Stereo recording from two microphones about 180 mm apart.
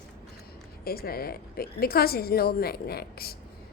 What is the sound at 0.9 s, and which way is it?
A woman's voice, 55° left (ahead or behind).